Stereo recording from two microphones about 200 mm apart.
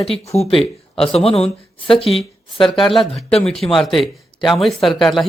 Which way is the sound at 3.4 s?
Centre (ahead or behind).